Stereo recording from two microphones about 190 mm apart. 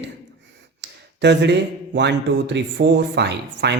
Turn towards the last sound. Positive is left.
turn(degrees=-60)  # may be behind; listen again after turning